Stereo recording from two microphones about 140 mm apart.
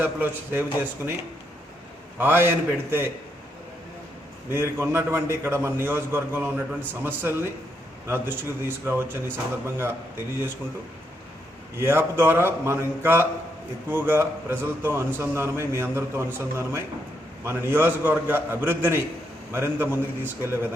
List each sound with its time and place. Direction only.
0.0 s a man's voice: 15° right (ahead or behind)
2.1 s a man's voice: 15° right (ahead or behind)
4.5 s a man's voice: 15° right (ahead or behind)
11.8 s a man's voice: 15° right (ahead or behind)